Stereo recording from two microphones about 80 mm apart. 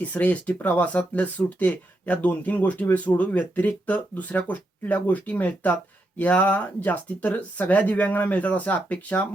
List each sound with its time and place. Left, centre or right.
0.0 s speech: centre